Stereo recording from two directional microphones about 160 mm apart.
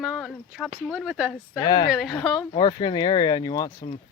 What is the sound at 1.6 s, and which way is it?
Speech, 25° left (ahead or behind).